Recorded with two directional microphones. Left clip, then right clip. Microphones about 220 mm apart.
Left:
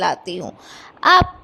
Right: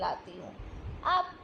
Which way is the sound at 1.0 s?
55° left (ahead or behind).